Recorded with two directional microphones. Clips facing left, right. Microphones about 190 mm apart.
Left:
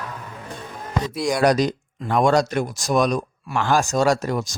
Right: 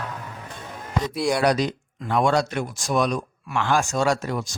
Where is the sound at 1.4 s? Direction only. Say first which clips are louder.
Left 3 dB; 45° left (ahead or behind).